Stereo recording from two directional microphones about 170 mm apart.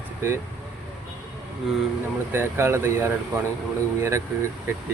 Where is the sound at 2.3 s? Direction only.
15° right (ahead or behind).